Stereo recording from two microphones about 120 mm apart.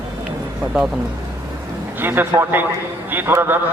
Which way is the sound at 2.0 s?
15° right (ahead or behind).